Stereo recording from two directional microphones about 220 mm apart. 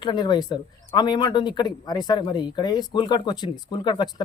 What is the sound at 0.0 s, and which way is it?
Speech, 20° left (ahead or behind).